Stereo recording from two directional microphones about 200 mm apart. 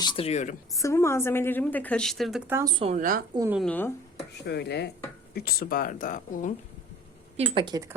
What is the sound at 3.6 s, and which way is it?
Speech, 10° left (ahead or behind).